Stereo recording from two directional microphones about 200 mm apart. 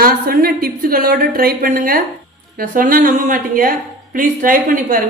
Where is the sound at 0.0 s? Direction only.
45° right (ahead or behind).